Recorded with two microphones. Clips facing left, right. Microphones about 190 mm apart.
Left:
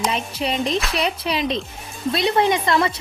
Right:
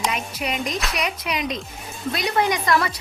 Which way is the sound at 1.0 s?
30° left (ahead or behind).